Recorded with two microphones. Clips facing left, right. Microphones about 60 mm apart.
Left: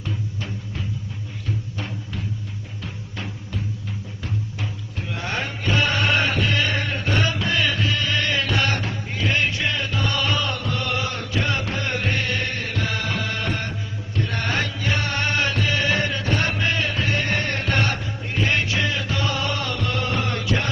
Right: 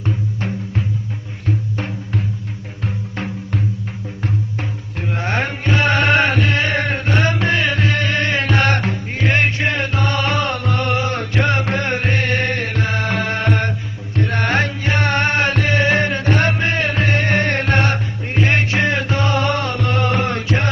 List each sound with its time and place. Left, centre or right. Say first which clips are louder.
1.5 s music: right 8 dB; right
4.9 s music: right 7 dB; right